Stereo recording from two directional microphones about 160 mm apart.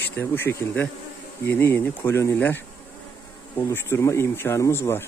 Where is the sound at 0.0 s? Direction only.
15° left (ahead or behind).